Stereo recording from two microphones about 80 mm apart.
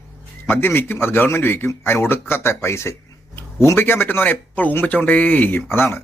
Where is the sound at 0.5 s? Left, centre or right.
Left.